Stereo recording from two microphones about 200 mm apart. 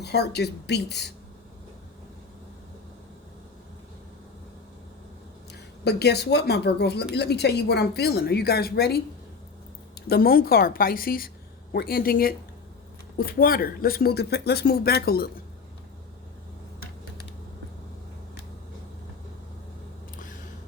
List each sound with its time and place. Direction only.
0.0 s speech: 55° left (ahead or behind)
5.5 s speech: 55° left (ahead or behind)
10.1 s speech: 50° left (ahead or behind)